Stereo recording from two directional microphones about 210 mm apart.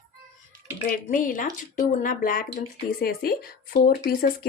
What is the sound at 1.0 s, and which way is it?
Speech, 40° left (ahead or behind).